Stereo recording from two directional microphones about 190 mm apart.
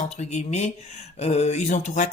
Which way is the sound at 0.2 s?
35° left (ahead or behind).